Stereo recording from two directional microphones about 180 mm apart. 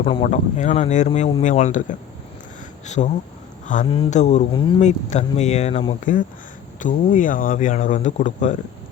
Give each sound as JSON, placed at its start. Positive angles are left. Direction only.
{"t": 0.0, "sound": "speech", "side_deg": 30}
{"t": 3.8, "sound": "speech", "side_deg": 30}
{"t": 4.1, "sound": "speech", "side_deg": 40}
{"t": 4.5, "sound": "speech", "side_deg": 30}
{"t": 4.8, "sound": "speech", "side_deg": 40}